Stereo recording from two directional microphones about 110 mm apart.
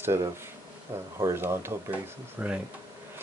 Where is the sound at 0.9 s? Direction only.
25° right (ahead or behind).